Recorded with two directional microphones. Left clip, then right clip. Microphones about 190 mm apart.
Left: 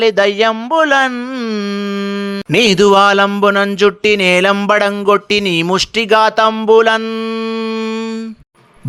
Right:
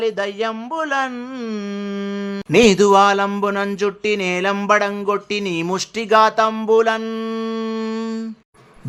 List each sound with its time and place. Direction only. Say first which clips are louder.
0.0 s speech: left 10 dB; 30° left (ahead or behind)
2.5 s speech: left 3 dB; 25° left (ahead or behind)